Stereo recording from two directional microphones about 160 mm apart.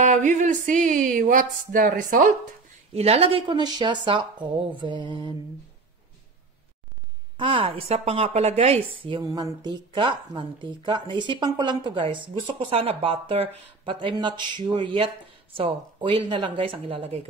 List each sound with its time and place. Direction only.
0.0 s a sound: 50° right (ahead or behind)
2.9 s speech: 40° right (ahead or behind)
7.3 s speech: 35° right (ahead or behind)